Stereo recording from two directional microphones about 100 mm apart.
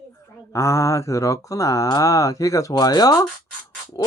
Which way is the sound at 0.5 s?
30° left (ahead or behind).